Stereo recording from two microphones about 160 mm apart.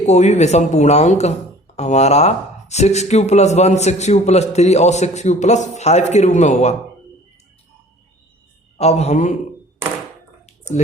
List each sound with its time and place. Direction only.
0.0 s speech: 45° left (ahead or behind)
8.8 s a man's voice: 40° left (ahead or behind)